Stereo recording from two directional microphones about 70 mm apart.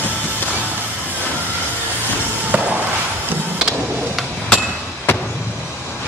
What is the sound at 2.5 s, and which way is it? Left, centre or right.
Chop, right.